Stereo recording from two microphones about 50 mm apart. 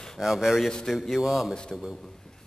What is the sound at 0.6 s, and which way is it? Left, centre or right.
Speech, centre.